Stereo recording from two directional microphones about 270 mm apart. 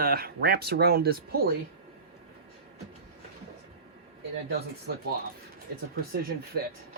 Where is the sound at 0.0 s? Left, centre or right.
Right.